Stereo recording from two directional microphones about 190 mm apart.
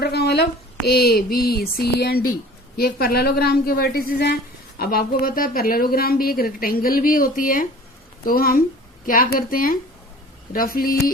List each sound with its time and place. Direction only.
0.0 s a woman's voice: 60° left (ahead or behind)